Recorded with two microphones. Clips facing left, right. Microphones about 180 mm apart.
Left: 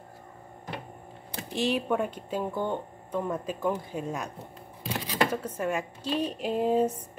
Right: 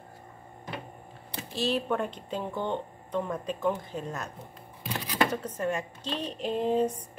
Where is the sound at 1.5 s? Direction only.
15° left (ahead or behind).